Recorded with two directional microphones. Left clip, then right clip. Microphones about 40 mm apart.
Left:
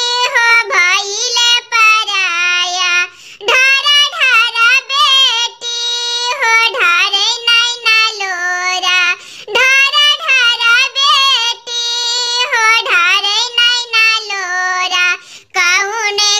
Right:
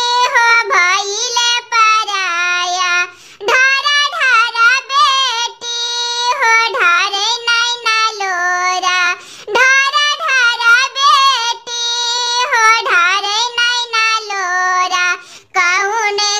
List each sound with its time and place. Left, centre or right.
0.0 s child singing: right